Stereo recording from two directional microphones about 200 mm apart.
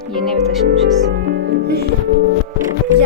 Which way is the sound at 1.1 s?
60° right (ahead or behind).